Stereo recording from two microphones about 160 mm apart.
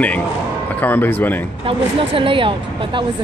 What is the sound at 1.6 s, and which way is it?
Speech, 35° right (ahead or behind).